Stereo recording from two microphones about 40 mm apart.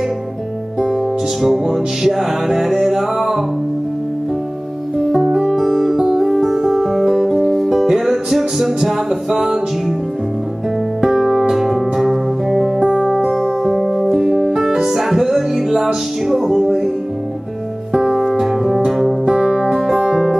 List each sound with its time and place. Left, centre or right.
1.4 s music: centre
5.1 s music: centre
5.9 s music: centre
6.2 s music: centre
11.0 s music: centre
12.8 s music: centre
13.3 s music: centre
17.9 s music: centre